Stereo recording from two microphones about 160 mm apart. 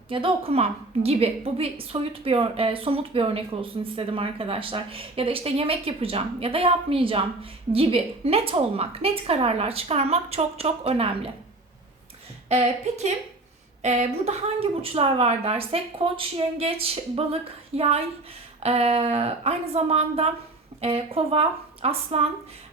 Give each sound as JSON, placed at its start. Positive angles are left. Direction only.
{"t": 0.1, "sound": "a woman's voice", "side_deg": -35}
{"t": 12.5, "sound": "a woman's voice", "side_deg": -45}